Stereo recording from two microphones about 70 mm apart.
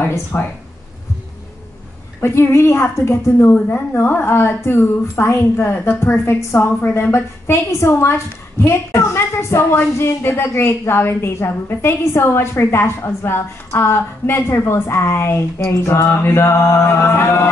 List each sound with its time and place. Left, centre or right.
0.3 s a woman's voice: left
2.1 s a woman's voice: left